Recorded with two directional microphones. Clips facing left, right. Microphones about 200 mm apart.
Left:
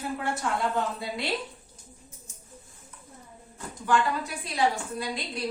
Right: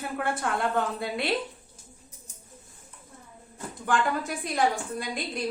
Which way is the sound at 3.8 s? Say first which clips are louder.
Left 1 dB; 50° right (ahead or behind).